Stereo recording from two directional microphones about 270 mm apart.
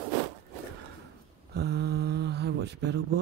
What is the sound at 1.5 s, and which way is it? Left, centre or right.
Speech, right.